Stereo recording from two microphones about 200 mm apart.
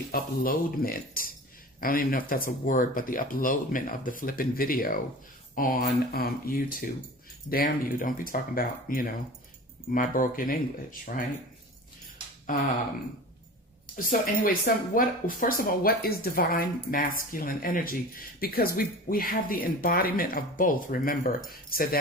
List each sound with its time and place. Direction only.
0.1 s speech: 45° left (ahead or behind)
12.5 s speech: 45° left (ahead or behind)
13.9 s speech: 40° left (ahead or behind)